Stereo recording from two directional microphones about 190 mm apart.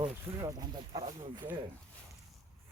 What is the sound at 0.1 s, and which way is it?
Speech, 15° right (ahead or behind).